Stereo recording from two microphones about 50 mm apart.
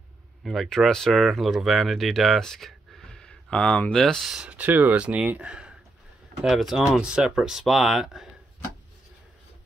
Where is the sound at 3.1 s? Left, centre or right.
Centre.